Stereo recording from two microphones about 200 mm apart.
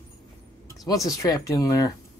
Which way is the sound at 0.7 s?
15° left (ahead or behind).